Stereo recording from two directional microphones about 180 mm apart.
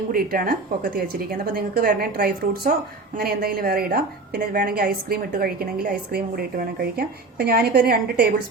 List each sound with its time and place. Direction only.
0.1 s a woman's voice: 55° right (ahead or behind)